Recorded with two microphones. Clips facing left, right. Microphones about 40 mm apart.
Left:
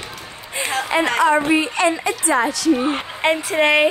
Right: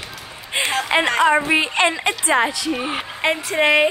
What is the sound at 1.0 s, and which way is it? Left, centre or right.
Music, centre.